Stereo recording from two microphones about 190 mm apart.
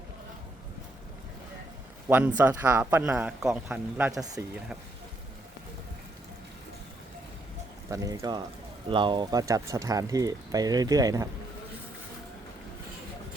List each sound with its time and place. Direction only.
2.0 s a man's voice: 10° right (ahead or behind)
7.9 s speech: 15° right (ahead or behind)